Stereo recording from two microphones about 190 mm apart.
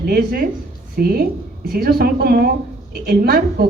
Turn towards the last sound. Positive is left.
turn(degrees=-55)  # may be behind; listen again after turning